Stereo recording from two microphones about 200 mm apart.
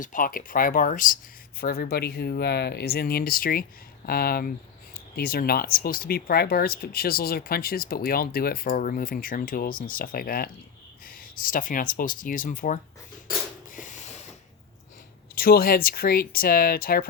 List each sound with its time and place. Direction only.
0.0 s speech: 40° left (ahead or behind)
13.7 s a sound: 40° left (ahead or behind)
15.4 s speech: 45° left (ahead or behind)